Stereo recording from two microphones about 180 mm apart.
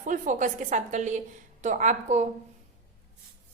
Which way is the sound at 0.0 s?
45° right (ahead or behind).